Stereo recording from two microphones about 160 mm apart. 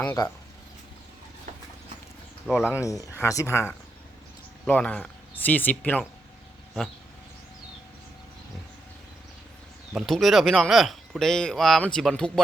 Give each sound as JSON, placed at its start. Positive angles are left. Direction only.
{"t": 0.2, "sound": "speech", "side_deg": 30}
{"t": 1.5, "sound": "clip-clop", "side_deg": -50}
{"t": 2.5, "sound": "speech", "side_deg": -5}
{"t": 2.8, "sound": "speech", "side_deg": 20}
{"t": 9.9, "sound": "speech", "side_deg": 0}